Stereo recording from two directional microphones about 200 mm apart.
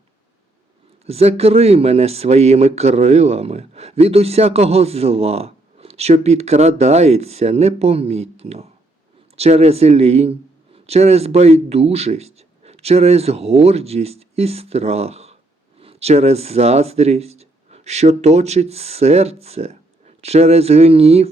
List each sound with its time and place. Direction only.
1.0 s speech: 30° right (ahead or behind)